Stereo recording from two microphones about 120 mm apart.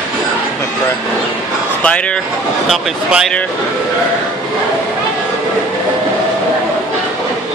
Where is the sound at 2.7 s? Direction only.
Centre (ahead or behind).